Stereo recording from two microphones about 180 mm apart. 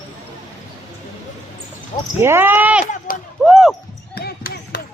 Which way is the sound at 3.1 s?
50° left (ahead or behind).